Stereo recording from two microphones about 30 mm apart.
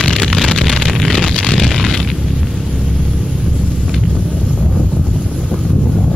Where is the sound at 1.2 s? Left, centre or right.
Left.